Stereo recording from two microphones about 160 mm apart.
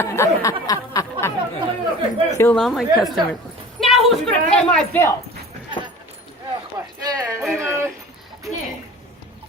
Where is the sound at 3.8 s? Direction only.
Centre (ahead or behind).